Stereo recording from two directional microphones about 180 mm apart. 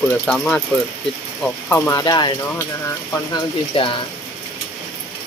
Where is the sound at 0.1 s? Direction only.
5° left (ahead or behind); by 3.9 s 30° left (ahead or behind).